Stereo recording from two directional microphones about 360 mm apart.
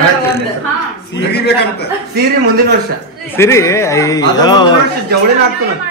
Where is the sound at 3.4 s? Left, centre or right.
Centre.